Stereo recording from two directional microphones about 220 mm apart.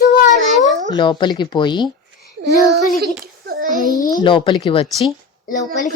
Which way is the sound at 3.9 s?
15° left (ahead or behind).